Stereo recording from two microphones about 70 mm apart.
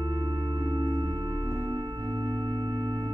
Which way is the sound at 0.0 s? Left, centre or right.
Right.